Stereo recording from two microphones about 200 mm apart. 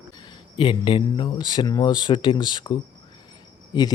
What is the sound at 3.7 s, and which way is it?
Speech, 20° left (ahead or behind).